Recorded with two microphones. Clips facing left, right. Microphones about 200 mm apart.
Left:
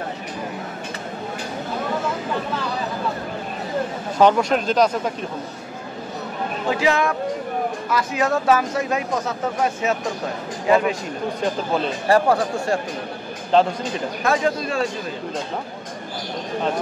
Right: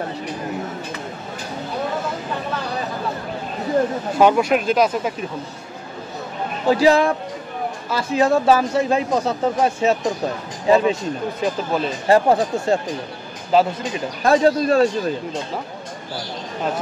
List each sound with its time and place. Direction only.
4.2 s speech: 10° right (ahead or behind)
6.7 s speech: 35° right (ahead or behind)
12.1 s speech: 20° right (ahead or behind)
13.5 s speech: 5° right (ahead or behind)
14.2 s speech: 35° right (ahead or behind)